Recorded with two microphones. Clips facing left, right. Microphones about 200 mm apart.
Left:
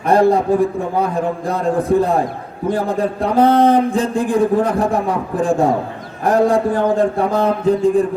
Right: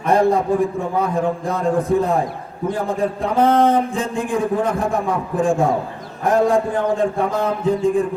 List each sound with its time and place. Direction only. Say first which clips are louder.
0.1 s a man's voice: left 3 dB; 35° left (ahead or behind)
1.5 s a man's voice: left 4 dB; 35° left (ahead or behind)